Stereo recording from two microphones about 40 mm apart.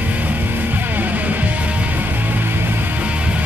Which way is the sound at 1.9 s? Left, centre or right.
Right.